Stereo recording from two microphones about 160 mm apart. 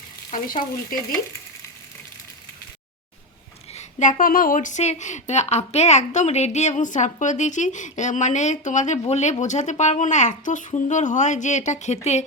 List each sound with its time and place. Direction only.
0.3 s frying: 60° left (ahead or behind)
3.7 s a sound: 45° left (ahead or behind)
4.2 s a woman's voice: 60° left (ahead or behind); by 12.2 s 45° left (ahead or behind)